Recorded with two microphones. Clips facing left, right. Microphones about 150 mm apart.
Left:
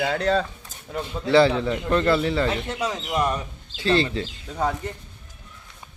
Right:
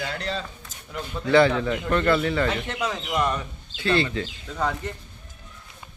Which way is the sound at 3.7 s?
35° left (ahead or behind).